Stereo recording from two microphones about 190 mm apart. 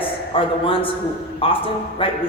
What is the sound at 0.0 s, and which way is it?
A man's voice, 30° left (ahead or behind).